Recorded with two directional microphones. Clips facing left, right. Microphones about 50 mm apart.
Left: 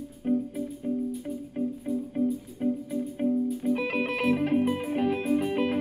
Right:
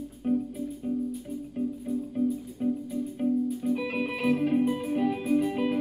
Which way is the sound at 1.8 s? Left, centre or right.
Left.